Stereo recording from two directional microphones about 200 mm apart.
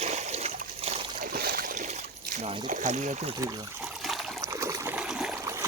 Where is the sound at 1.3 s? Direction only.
45° right (ahead or behind).